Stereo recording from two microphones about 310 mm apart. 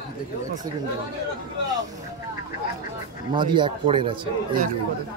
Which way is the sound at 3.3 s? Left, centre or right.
Centre.